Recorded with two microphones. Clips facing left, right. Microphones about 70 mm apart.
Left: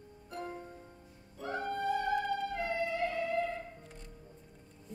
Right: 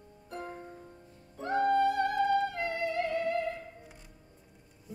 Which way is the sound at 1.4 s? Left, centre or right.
Right.